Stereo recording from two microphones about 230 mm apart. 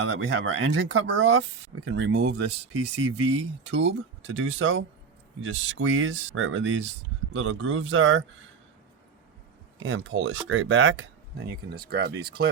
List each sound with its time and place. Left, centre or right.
0.0 s speech: right
9.8 s speech: right
11.7 s speech: right